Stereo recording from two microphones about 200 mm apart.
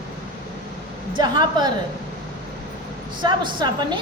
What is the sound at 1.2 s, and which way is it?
Speech, 20° right (ahead or behind).